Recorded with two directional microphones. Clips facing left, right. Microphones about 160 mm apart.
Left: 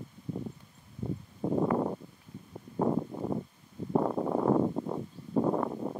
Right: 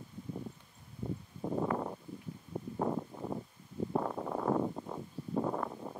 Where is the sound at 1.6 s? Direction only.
40° left (ahead or behind).